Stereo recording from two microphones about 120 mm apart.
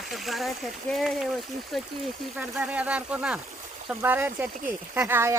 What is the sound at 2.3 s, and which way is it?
Speech, 10° right (ahead or behind).